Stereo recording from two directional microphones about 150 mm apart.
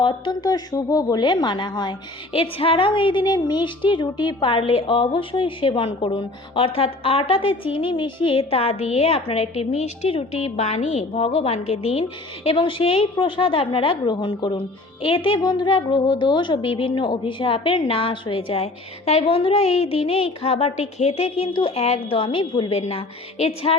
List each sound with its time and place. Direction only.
0.0 s a woman's voice: 30° left (ahead or behind)
22.7 s a woman's voice: 45° left (ahead or behind)